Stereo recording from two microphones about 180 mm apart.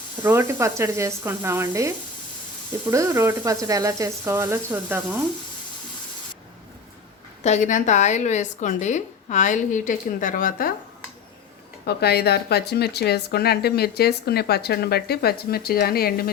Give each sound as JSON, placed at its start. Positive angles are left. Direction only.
{"t": 0.2, "sound": "speech", "side_deg": -10}
{"t": 7.4, "sound": "a woman's voice", "side_deg": 40}
{"t": 11.9, "sound": "speech", "side_deg": 65}